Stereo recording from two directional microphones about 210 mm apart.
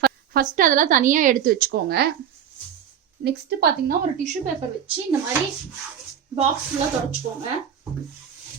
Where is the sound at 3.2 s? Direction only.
50° right (ahead or behind).